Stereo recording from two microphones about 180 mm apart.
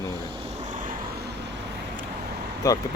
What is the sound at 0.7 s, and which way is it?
Vehicle, 45° right (ahead or behind).